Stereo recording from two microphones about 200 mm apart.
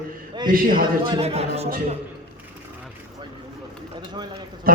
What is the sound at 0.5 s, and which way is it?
Speech, 45° right (ahead or behind).